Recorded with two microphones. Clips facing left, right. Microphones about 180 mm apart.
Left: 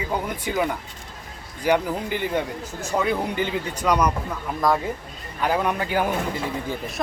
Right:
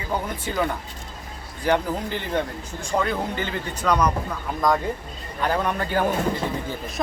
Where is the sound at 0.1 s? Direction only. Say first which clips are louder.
Right 2 dB; 10° left (ahead or behind).